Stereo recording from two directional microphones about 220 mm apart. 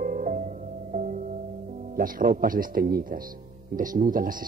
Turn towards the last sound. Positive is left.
turn(degrees=-40)  # may be behind; listen again after turning